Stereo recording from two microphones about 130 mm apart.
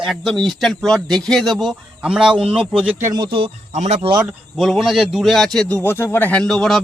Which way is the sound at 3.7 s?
60° right (ahead or behind).